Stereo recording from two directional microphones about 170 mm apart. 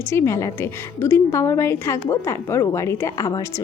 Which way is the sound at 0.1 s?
15° left (ahead or behind).